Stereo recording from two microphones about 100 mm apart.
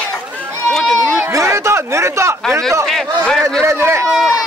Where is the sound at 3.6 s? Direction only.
25° right (ahead or behind).